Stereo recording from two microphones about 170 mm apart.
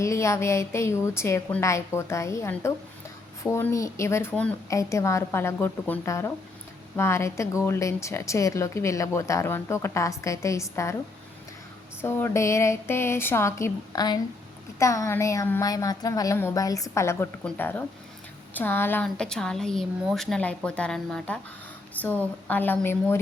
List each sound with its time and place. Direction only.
0.0 s speech: 15° left (ahead or behind)
12.0 s a woman's voice: 15° left (ahead or behind)
22.0 s a sound: 10° left (ahead or behind)
22.4 s speech: 10° left (ahead or behind)